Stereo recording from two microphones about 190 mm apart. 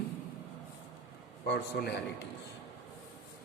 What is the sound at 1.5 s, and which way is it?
Speech, 65° left (ahead or behind).